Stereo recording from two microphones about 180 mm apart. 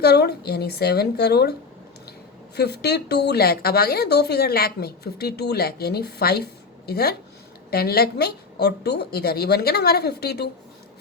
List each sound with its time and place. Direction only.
0.0 s speech: 65° left (ahead or behind)
2.6 s speech: 65° left (ahead or behind)